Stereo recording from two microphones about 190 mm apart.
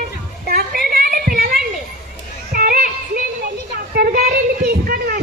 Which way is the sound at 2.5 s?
50° right (ahead or behind).